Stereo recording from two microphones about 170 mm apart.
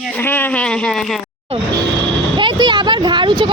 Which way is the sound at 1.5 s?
35° right (ahead or behind).